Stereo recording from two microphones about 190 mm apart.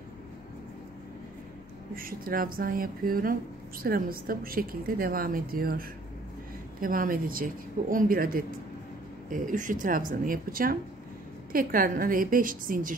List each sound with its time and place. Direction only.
2.0 s a woman's voice: 50° right (ahead or behind)